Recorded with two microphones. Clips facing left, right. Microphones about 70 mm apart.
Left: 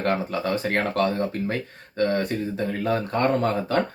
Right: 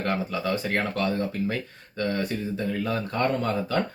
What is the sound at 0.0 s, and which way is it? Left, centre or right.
A man's voice, left.